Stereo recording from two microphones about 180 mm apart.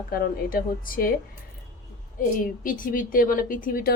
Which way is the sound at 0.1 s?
55° left (ahead or behind).